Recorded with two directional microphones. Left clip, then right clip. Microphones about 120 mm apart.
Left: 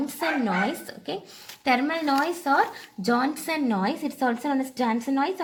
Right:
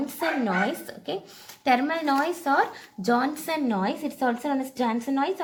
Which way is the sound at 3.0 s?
30° left (ahead or behind).